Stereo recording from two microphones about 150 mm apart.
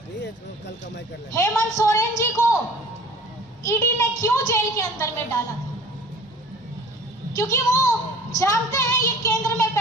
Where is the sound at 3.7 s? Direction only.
20° left (ahead or behind).